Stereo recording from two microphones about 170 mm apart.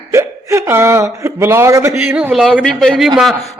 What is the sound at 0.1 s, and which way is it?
Speech, 15° right (ahead or behind).